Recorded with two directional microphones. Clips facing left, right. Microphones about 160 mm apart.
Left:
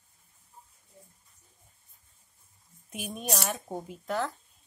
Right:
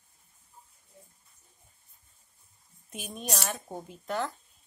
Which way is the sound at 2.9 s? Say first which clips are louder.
Left 2 dB; 5° left (ahead or behind).